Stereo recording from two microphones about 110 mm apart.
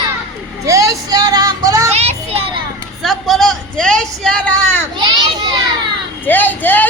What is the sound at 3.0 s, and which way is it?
Speech, centre (ahead or behind).